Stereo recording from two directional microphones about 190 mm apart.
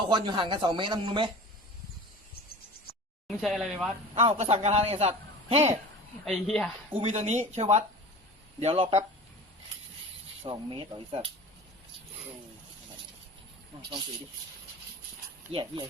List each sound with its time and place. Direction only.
0.1 s speech: 25° right (ahead or behind)
3.2 s speech: centre (ahead or behind)
4.1 s a man's voice: 30° right (ahead or behind)
6.2 s speech: centre (ahead or behind)
7.0 s a man's voice: 35° right (ahead or behind)
10.4 s speech: 25° right (ahead or behind)